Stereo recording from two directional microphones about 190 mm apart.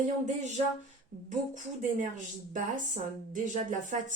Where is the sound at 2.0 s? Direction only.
45° right (ahead or behind).